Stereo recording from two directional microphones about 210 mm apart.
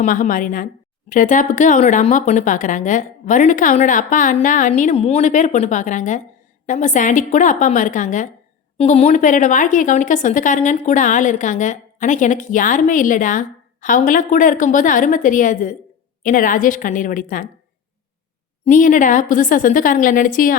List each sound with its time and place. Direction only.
0.0 s speech: 40° left (ahead or behind)
18.6 s speech: 40° left (ahead or behind)